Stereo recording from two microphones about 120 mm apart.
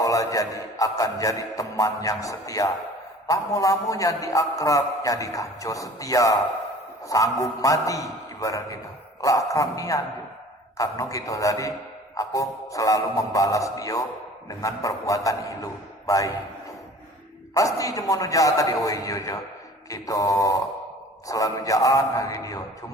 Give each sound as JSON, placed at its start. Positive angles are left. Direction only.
{"t": 0.0, "sound": "music", "side_deg": 30}
{"t": 17.5, "sound": "music", "side_deg": 30}